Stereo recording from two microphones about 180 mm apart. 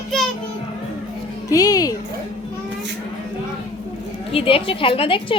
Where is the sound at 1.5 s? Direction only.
20° left (ahead or behind).